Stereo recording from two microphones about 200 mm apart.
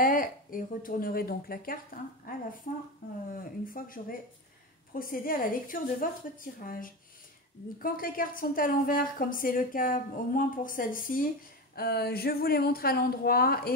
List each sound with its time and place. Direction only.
0.0 s a woman's voice: 45° left (ahead or behind)
3.3 s a woman's voice: 45° left (ahead or behind)